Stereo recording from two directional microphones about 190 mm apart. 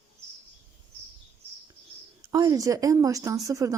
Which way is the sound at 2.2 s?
15° right (ahead or behind).